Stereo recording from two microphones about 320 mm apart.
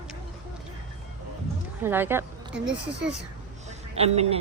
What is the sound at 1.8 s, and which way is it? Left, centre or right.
Speech, centre.